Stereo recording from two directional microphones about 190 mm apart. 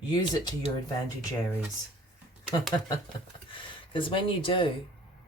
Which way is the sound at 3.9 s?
25° left (ahead or behind).